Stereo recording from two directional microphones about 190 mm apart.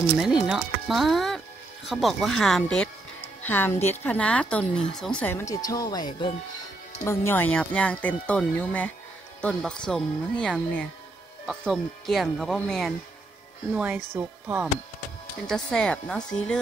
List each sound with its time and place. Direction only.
0.2 s speech: 5° right (ahead or behind); by 6.0 s 20° left (ahead or behind)
7.1 s speech: 10° left (ahead or behind)
14.1 s speech: 10° right (ahead or behind)
15.4 s speech: 5° left (ahead or behind)